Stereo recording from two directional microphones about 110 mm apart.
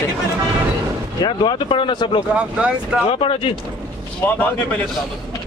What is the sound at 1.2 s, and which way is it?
Speech, 45° left (ahead or behind).